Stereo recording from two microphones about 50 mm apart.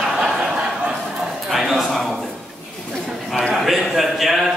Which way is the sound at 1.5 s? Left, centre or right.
Centre.